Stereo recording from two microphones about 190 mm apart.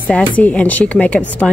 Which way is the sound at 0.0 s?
5° left (ahead or behind).